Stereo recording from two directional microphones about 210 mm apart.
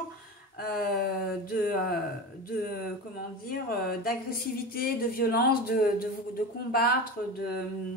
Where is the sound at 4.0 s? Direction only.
45° left (ahead or behind).